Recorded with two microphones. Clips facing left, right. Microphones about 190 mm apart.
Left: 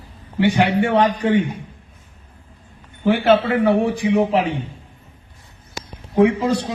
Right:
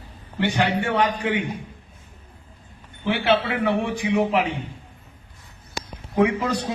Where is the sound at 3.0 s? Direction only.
45° left (ahead or behind).